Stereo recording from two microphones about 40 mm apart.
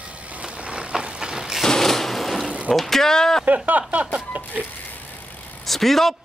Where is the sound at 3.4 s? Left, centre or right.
Right.